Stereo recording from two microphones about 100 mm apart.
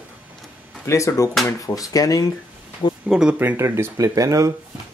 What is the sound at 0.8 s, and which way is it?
Speech, 30° left (ahead or behind).